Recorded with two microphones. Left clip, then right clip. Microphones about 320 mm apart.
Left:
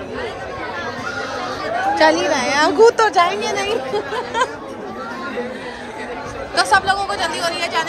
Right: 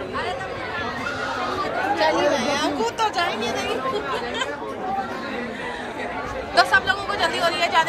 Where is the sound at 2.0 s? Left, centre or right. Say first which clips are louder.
Left 6 dB; left.